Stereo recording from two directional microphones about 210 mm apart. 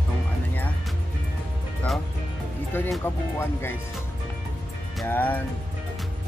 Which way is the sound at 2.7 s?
10° left (ahead or behind).